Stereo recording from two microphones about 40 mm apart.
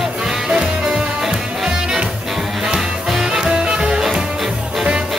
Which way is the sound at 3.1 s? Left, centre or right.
Centre.